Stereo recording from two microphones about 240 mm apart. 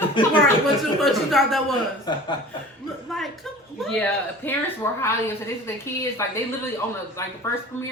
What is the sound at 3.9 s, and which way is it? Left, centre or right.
A woman's voice, centre.